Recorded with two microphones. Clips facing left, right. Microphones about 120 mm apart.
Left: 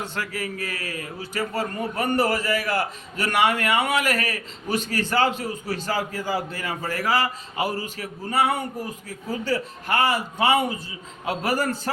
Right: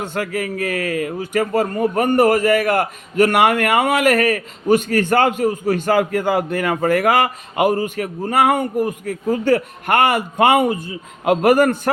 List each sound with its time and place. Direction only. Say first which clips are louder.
0.0 s a man's voice: right 7 dB; 50° right (ahead or behind)